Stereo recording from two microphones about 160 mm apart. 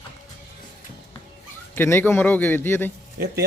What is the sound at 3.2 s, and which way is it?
Speech, 70° right (ahead or behind).